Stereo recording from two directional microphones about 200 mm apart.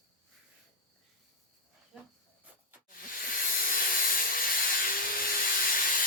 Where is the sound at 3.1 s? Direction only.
45° left (ahead or behind).